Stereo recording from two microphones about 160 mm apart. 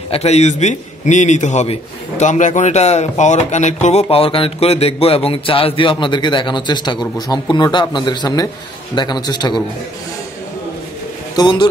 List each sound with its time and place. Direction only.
0.1 s a man's voice: 40° left (ahead or behind); by 9.6 s 25° left (ahead or behind)
11.3 s a man's voice: 30° left (ahead or behind)